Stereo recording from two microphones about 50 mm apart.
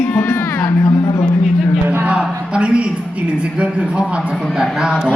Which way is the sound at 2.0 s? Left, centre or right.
Right.